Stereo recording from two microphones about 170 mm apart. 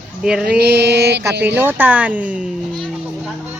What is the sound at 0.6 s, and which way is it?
Mantra, 75° right (ahead or behind).